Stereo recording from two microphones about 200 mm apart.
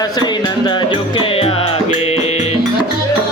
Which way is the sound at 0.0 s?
20° left (ahead or behind).